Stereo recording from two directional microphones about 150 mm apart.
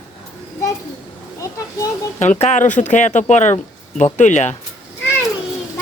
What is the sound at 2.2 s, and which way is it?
Speech, 50° left (ahead or behind).